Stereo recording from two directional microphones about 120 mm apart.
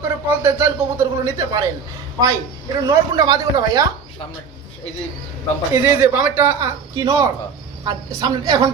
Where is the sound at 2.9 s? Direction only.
30° right (ahead or behind).